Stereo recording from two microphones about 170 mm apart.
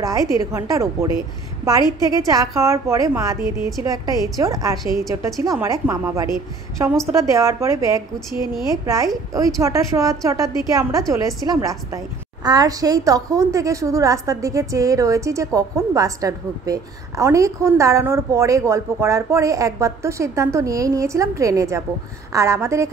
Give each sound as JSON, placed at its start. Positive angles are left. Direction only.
{"t": 0.0, "sound": "a woman's voice", "side_deg": -20}